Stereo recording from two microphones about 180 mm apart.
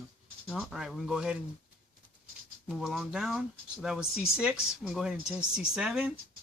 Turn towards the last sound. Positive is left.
turn(degrees=-5)  # may be behind; listen again after turning